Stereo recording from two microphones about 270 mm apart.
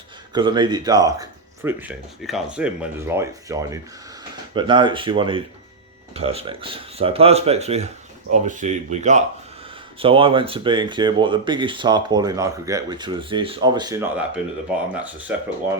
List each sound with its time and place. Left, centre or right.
0.3 s speech: centre